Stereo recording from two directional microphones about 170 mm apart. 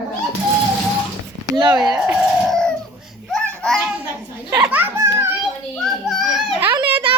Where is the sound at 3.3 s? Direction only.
5° left (ahead or behind).